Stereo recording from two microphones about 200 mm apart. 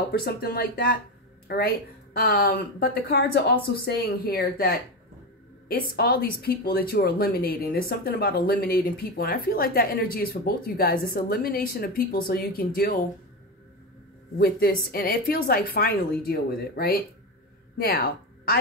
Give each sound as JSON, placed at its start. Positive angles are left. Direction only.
{"t": 0.2, "sound": "a woman's voice", "side_deg": 50}
{"t": 14.9, "sound": "a woman's voice", "side_deg": 50}